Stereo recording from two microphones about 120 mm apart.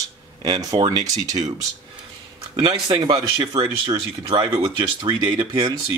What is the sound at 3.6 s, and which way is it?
Speech, 45° right (ahead or behind).